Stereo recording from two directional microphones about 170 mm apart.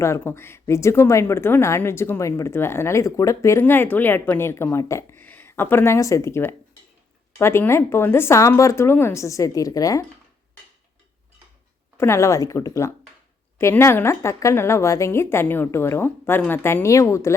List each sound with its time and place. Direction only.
0.0 s a woman's voice: 15° left (ahead or behind)
11.9 s a woman's voice: 15° left (ahead or behind)